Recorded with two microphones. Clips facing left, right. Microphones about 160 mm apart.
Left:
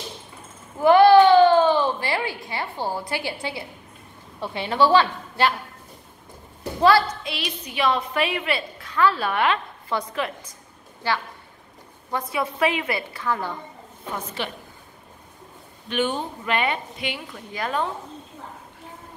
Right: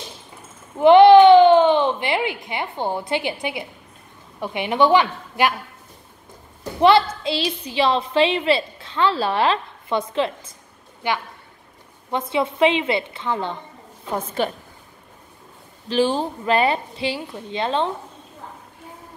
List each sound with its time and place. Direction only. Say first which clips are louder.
0.7 s a sound: right 4 dB; 20° right (ahead or behind)
4.4 s a woman's voice: right 2 dB; 15° right (ahead or behind)
6.8 s a woman's voice: right 3 dB; 25° right (ahead or behind)
14.1 s a woman's voice: right 7 dB; 45° right (ahead or behind)
15.9 s a woman's voice: right 5 dB; 30° right (ahead or behind)